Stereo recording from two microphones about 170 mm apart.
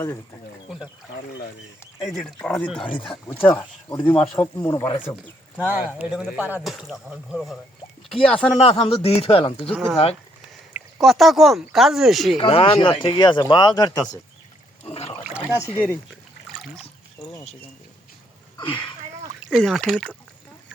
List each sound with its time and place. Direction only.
2.0 s speech: centre (ahead or behind)
2.8 s speech: 30° left (ahead or behind)
3.1 s speech: 10° left (ahead or behind)
5.5 s speech: 10° right (ahead or behind)
8.1 s speech: 5° left (ahead or behind)
8.6 s speech: 35° left (ahead or behind)
9.6 s speech: centre (ahead or behind)
12.4 s speech: 30° left (ahead or behind)
14.8 s a sound: 35° left (ahead or behind)
15.2 s rowboat: 10° right (ahead or behind)
16.0 s trickle: centre (ahead or behind)
19.4 s speech: centre (ahead or behind)